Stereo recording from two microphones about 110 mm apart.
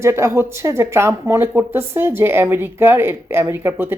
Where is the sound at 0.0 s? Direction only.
25° right (ahead or behind).